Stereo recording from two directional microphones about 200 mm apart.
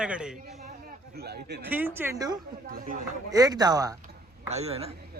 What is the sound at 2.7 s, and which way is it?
Speech, 45° right (ahead or behind).